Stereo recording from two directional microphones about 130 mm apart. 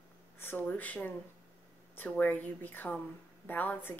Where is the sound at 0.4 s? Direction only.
15° left (ahead or behind).